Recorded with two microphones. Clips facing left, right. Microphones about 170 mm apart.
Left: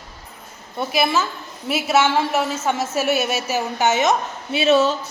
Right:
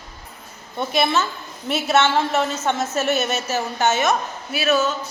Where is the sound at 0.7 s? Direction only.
5° left (ahead or behind).